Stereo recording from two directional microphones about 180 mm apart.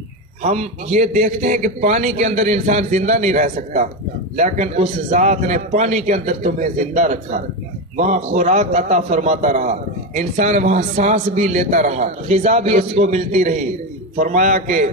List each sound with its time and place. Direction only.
0.4 s a man's voice: 40° right (ahead or behind)